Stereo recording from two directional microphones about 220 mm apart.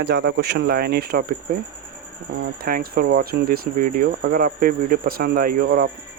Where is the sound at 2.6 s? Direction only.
40° right (ahead or behind).